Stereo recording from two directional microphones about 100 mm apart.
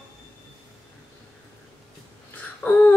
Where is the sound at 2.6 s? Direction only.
20° left (ahead or behind).